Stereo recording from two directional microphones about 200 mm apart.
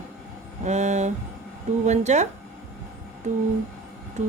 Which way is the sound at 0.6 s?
35° right (ahead or behind).